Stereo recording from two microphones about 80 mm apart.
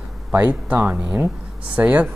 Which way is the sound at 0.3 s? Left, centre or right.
Centre.